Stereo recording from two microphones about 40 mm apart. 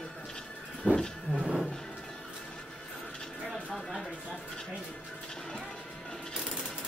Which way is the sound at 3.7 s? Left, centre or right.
Centre.